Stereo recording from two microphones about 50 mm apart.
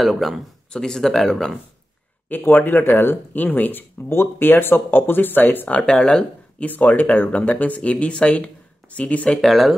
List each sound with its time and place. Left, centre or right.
0.0 s speech: centre
0.7 s speech: centre
2.2 s speech: left
5.9 s speech: centre
6.6 s speech: left
9.4 s speech: centre